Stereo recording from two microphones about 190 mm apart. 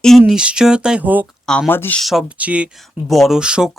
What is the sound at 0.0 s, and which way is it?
Speech, centre (ahead or behind).